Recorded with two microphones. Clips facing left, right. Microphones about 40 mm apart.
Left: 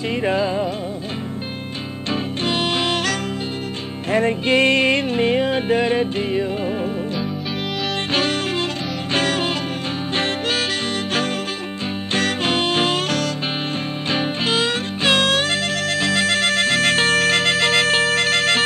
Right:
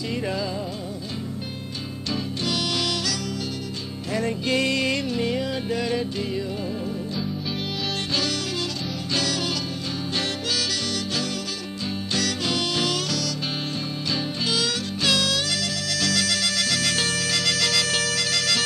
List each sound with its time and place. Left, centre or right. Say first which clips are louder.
0.1 s music: left 8 dB; left
2.4 s music: left 5 dB; left
8.1 s music: left 8 dB; left
12.1 s music: left 6 dB; left